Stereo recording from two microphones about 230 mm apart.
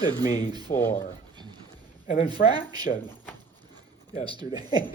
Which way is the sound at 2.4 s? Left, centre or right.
Left.